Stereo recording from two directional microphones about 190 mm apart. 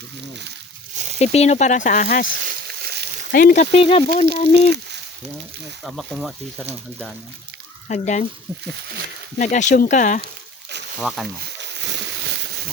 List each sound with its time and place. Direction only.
1.2 s speech: 35° left (ahead or behind)
2.8 s a sound: 60° right (ahead or behind)
3.3 s speech: 45° left (ahead or behind)
5.8 s speech: centre (ahead or behind)
7.9 s speech: 40° left (ahead or behind)
9.4 s speech: 40° left (ahead or behind)
11.0 s speech: centre (ahead or behind)
11.7 s a sound: 65° right (ahead or behind)